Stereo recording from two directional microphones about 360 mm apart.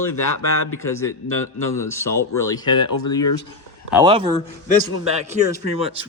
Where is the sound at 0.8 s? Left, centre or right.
Centre.